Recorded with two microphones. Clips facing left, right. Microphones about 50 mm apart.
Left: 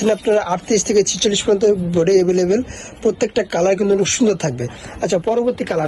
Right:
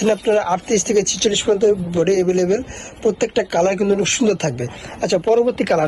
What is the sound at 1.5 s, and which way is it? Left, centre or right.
A woman's voice, centre.